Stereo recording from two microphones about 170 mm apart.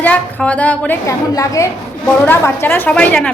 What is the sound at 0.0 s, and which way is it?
A woman's voice, 10° left (ahead or behind).